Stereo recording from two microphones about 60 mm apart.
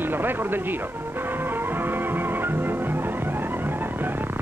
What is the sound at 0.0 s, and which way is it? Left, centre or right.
Music, right.